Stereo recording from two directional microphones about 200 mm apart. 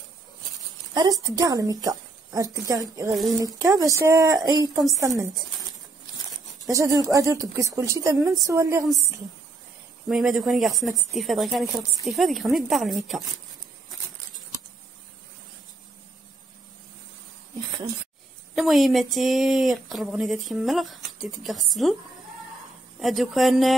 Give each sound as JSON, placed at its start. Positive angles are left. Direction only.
{"t": 0.9, "sound": "a woman's voice", "side_deg": -20}
{"t": 7.1, "sound": "a woman's voice", "side_deg": -15}
{"t": 10.0, "sound": "speech", "side_deg": 0}
{"t": 18.5, "sound": "speech", "side_deg": 0}
{"t": 22.9, "sound": "speech", "side_deg": 0}